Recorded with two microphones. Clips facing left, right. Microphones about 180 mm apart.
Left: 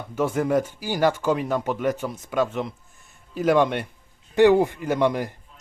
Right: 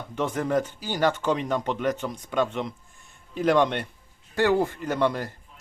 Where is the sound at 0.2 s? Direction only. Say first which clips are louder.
Left 3 dB; 10° left (ahead or behind).